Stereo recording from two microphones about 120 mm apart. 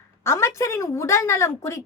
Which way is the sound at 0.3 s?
25° left (ahead or behind).